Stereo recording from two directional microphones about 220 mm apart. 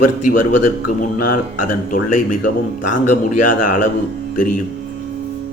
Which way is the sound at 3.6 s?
35° left (ahead or behind).